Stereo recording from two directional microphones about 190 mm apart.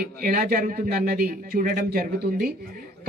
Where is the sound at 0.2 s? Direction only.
50° right (ahead or behind).